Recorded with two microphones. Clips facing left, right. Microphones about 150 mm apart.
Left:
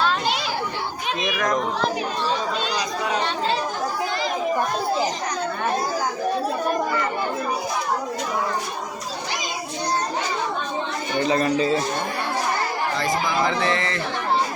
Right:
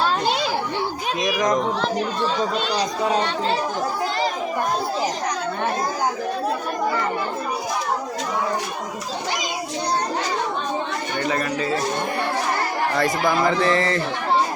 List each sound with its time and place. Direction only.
2.7 s speech: 30° right (ahead or behind)
11.2 s a man's voice: 25° left (ahead or behind)
13.0 s speech: 50° right (ahead or behind)
13.5 s speech: 35° right (ahead or behind)